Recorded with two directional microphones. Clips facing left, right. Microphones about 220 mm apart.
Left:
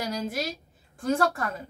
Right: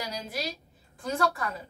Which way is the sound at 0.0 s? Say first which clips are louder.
Left 5 dB; 50° left (ahead or behind).